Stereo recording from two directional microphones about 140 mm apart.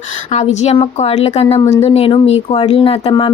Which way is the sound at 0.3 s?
50° left (ahead or behind).